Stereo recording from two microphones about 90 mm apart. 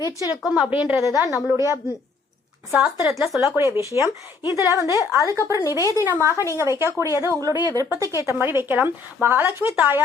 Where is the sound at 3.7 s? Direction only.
40° left (ahead or behind).